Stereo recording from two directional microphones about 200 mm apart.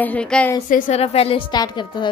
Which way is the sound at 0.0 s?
5° left (ahead or behind).